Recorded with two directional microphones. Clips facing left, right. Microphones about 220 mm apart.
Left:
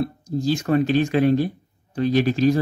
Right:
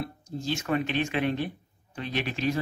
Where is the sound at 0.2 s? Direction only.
35° left (ahead or behind).